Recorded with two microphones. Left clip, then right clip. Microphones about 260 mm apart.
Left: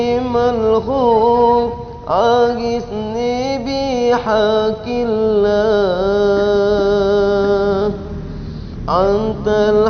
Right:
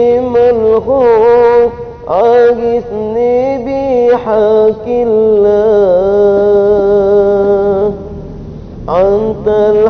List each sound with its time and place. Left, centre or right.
0.0 s music: left
2.0 s mantra: left
6.6 s music: left
8.9 s mantra: left